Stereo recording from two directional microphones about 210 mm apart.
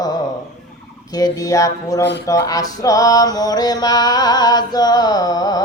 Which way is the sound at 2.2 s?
15° left (ahead or behind).